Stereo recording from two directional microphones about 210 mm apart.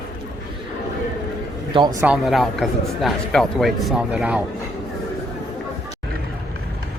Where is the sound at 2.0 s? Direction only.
5° right (ahead or behind).